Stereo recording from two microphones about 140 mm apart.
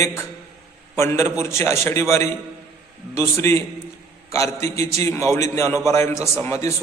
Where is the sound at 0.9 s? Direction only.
20° left (ahead or behind).